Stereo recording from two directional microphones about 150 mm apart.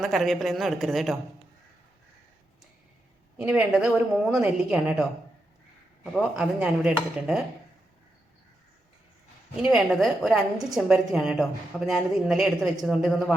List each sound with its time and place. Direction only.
0.0 s a woman's voice: centre (ahead or behind)
3.3 s a woman's voice: 10° right (ahead or behind)
9.6 s a woman's voice: 5° right (ahead or behind)